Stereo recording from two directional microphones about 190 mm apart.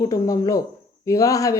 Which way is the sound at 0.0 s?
15° left (ahead or behind).